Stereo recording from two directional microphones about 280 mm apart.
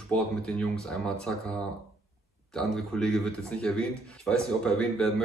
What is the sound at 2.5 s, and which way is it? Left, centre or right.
Speech, centre.